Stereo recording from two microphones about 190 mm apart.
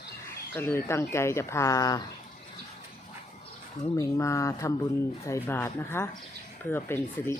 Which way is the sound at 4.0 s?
15° left (ahead or behind).